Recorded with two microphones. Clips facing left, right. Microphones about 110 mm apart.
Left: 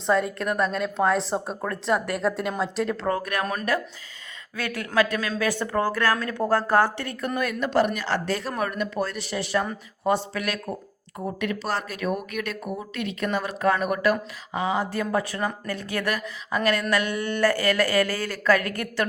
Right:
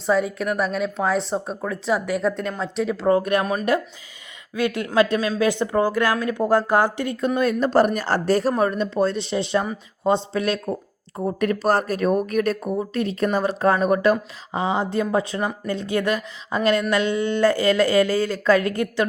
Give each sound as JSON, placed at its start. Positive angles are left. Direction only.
{"t": 0.0, "sound": "a woman's voice", "side_deg": 0}
{"t": 3.1, "sound": "speech", "side_deg": -25}
{"t": 7.6, "sound": "speech", "side_deg": -40}
{"t": 8.5, "sound": "speech", "side_deg": -30}
{"t": 11.3, "sound": "speech", "side_deg": -45}